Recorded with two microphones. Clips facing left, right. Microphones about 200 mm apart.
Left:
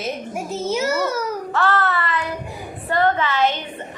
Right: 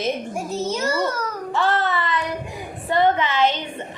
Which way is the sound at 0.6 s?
10° left (ahead or behind).